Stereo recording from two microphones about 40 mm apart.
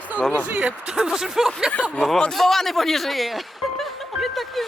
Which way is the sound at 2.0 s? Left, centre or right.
Centre.